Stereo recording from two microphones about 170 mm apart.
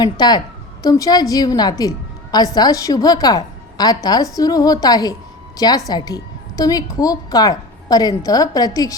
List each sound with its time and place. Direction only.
0.0 s a woman's voice: 25° left (ahead or behind)
1.8 s a sound: 20° left (ahead or behind)
2.6 s a woman's voice: 20° left (ahead or behind)